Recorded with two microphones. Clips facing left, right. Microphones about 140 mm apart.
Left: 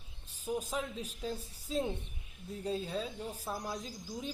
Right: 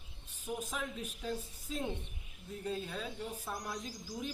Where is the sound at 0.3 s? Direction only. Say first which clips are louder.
Left 4 dB; 35° left (ahead or behind).